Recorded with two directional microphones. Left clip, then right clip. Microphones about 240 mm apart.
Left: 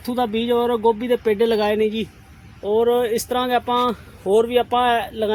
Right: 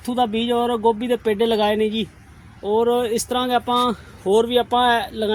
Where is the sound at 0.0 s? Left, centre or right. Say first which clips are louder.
Right 1 dB; right.